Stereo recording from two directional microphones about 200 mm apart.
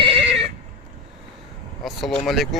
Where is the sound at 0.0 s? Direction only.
30° right (ahead or behind).